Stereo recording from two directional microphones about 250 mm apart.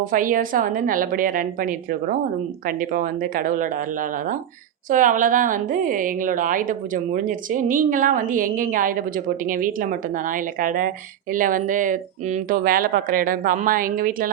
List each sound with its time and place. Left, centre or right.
0.0 s a woman's voice: right